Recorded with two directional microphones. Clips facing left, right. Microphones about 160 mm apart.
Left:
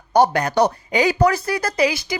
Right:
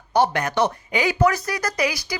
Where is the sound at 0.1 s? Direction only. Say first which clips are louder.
Left 4 dB; 40° left (ahead or behind).